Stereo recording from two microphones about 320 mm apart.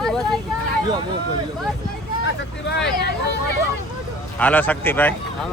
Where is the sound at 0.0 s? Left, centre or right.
Centre.